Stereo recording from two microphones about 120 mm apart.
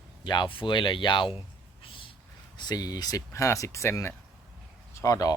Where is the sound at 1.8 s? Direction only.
45° left (ahead or behind).